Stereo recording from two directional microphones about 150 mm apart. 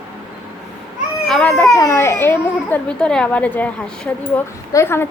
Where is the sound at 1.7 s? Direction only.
20° left (ahead or behind).